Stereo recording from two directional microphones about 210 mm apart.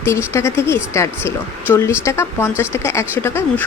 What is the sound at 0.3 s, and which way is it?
Speech, 15° left (ahead or behind).